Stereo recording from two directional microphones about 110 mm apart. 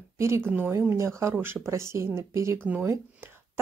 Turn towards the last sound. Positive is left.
turn(degrees=-25)  # may be behind; listen again after turning